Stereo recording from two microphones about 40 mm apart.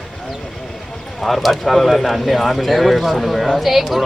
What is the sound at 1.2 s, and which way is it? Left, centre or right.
Speech, centre.